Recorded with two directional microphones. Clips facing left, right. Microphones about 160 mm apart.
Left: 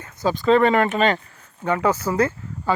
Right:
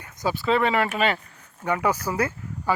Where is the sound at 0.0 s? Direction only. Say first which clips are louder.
Left 5 dB; 10° right (ahead or behind).